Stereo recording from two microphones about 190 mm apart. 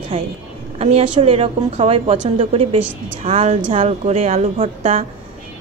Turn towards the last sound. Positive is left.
turn(degrees=-30)  # may be behind; listen again after turning